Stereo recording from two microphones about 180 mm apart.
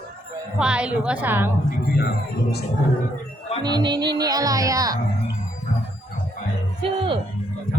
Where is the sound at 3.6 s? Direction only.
25° right (ahead or behind).